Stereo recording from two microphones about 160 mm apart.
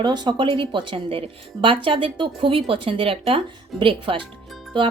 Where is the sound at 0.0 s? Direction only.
30° right (ahead or behind).